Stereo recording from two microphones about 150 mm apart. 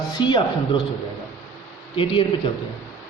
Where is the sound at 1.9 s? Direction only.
35° left (ahead or behind).